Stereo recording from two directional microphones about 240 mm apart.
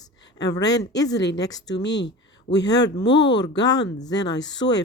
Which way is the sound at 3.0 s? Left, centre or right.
Left.